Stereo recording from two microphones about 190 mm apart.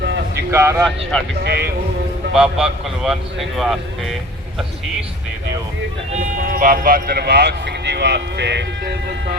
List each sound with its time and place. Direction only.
0.0 s a sound: 65° right (ahead or behind)
0.5 s speech: 15° right (ahead or behind)
1.1 s speech: 5° left (ahead or behind)
1.5 s speech: 60° right (ahead or behind)
2.3 s speech: 5° right (ahead or behind)
6.1 s speech: 45° right (ahead or behind); by 8.6 s 65° right (ahead or behind)